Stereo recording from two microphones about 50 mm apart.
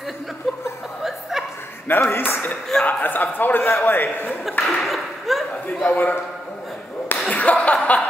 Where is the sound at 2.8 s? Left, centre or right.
Left.